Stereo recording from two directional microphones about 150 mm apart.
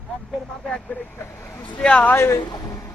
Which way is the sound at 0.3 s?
5° left (ahead or behind).